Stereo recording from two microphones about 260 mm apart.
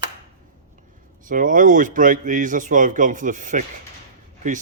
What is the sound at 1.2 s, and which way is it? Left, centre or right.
Speech, right.